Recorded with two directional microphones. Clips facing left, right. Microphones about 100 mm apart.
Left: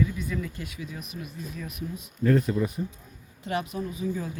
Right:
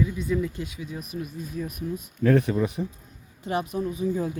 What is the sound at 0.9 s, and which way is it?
Speech, 40° right (ahead or behind).